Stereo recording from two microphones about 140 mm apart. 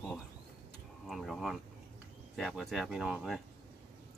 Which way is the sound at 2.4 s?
Centre (ahead or behind).